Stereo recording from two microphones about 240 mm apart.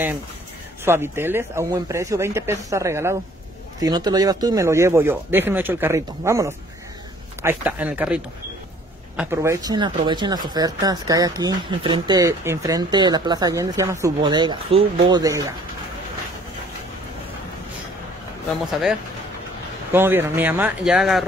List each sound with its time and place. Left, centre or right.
0.8 s speech: centre
19.9 s speech: centre